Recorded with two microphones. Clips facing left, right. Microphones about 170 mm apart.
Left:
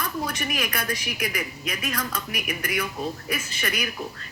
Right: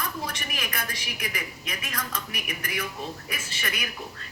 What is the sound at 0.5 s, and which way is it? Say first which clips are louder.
Speech: left 5 dB; 35° left (ahead or behind).